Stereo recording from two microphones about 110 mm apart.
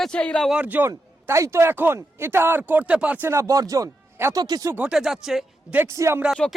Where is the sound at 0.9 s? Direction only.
25° right (ahead or behind).